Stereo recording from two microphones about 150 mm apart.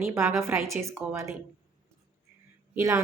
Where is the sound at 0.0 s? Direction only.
20° right (ahead or behind).